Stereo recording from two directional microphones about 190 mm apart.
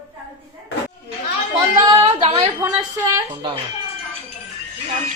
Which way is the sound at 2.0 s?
30° right (ahead or behind).